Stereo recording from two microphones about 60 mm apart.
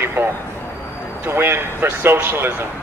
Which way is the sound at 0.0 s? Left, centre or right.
Right.